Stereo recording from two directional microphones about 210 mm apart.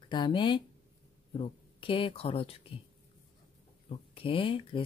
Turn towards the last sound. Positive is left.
turn(degrees=25)  # may be behind; listen again after turning